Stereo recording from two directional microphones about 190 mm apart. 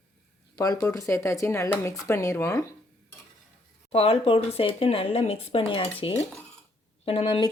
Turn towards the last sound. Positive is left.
turn(degrees=30)  # may be behind; listen again after turning